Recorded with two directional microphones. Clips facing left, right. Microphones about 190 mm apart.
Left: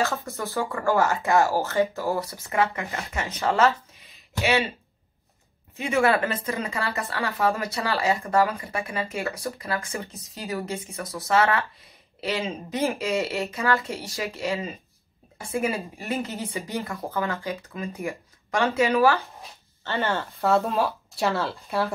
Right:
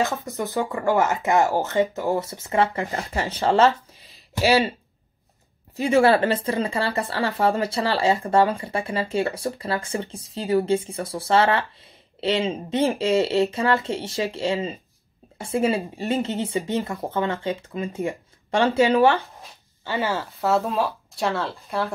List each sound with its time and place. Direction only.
0.0 s speech: 20° right (ahead or behind); by 4.6 s 35° right (ahead or behind)
5.8 s speech: 35° right (ahead or behind)
19.8 s speech: 10° right (ahead or behind)